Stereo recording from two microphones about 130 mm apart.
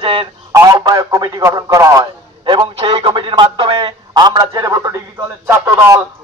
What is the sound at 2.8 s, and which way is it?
A man's voice, 45° right (ahead or behind).